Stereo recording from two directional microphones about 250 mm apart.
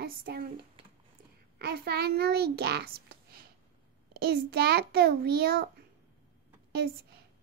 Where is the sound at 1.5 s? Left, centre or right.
Right.